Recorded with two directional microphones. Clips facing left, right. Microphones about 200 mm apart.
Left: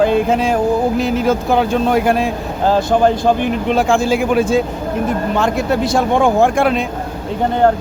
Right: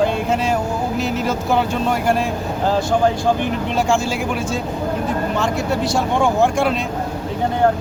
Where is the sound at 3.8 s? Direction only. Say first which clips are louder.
Left 4 dB; 55° left (ahead or behind); by 4.5 s 90° left.